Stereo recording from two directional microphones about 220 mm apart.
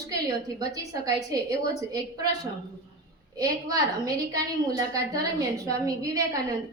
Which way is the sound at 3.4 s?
15° right (ahead or behind).